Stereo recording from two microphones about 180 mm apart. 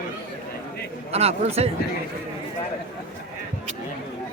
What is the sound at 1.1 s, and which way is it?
Speech, 35° right (ahead or behind).